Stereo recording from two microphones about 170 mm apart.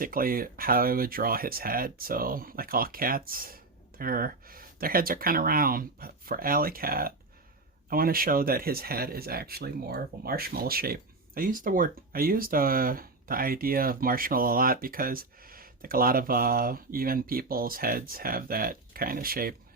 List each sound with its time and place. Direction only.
0.0 s speech: 55° right (ahead or behind)